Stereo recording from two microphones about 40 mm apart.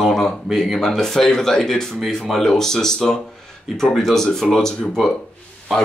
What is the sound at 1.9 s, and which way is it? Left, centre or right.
Speech, centre.